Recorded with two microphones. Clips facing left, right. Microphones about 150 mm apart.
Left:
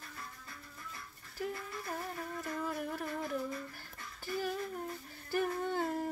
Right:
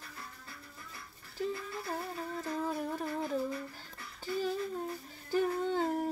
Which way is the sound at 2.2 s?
20° right (ahead or behind).